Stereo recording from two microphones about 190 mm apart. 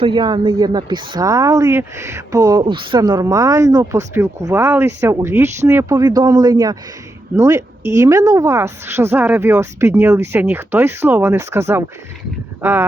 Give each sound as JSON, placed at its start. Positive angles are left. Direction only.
{"t": 0.0, "sound": "a woman's voice", "side_deg": -25}